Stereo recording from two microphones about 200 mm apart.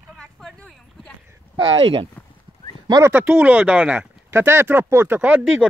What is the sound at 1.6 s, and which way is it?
Speech, 25° right (ahead or behind).